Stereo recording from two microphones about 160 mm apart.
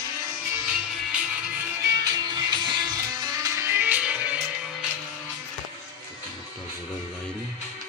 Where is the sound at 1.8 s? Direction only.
25° right (ahead or behind).